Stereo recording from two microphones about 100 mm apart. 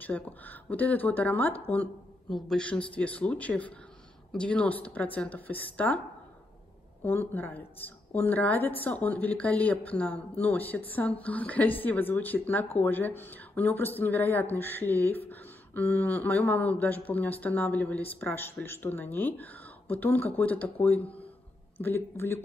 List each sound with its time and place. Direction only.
0.0 s a woman's voice: 15° left (ahead or behind)
7.1 s a woman's voice: 20° left (ahead or behind)
21.8 s speech: 25° left (ahead or behind)